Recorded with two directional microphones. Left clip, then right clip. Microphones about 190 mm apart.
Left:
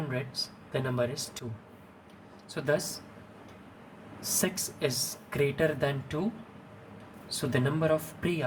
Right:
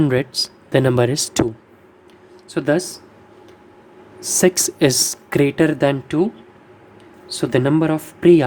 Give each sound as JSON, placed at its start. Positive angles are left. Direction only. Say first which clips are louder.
{"t": 0.1, "sound": "speech", "louder": "right 15 dB", "side_deg": -55}
{"t": 2.6, "sound": "speech", "louder": "right 11 dB", "side_deg": -45}
{"t": 4.2, "sound": "speech", "louder": "right 15 dB", "side_deg": -50}
{"t": 7.3, "sound": "speech", "louder": "right 13 dB", "side_deg": -45}